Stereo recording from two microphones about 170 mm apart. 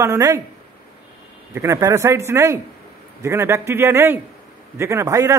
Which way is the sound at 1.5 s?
15° right (ahead or behind).